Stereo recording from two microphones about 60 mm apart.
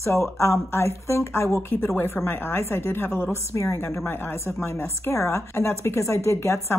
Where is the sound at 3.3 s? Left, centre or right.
Left.